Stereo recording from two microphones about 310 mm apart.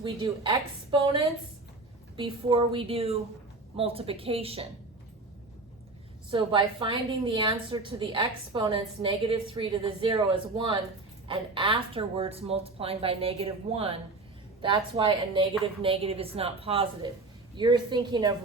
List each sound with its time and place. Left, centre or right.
0.0 s a woman's voice: centre
6.3 s a woman's voice: centre